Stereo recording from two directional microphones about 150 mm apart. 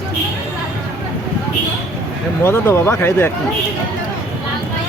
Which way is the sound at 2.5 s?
15° left (ahead or behind).